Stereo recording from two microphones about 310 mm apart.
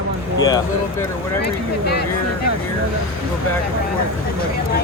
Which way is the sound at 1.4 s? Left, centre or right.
Left.